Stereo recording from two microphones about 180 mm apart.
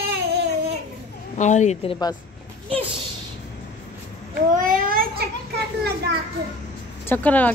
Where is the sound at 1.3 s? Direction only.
40° left (ahead or behind); by 2.2 s 25° left (ahead or behind).